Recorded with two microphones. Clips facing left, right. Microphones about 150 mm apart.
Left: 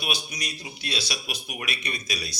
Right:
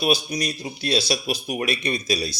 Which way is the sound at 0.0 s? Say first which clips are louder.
Right 10 dB; 35° right (ahead or behind).